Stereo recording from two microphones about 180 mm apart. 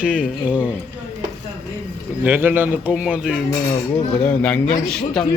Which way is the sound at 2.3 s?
10° right (ahead or behind).